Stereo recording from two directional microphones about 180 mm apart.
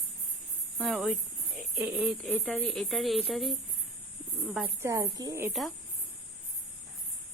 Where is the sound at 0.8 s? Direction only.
Centre (ahead or behind).